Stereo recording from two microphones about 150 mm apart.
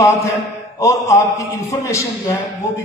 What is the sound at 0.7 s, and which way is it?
A man's voice, 20° left (ahead or behind).